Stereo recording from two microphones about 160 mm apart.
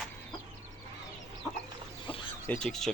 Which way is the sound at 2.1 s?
35° left (ahead or behind).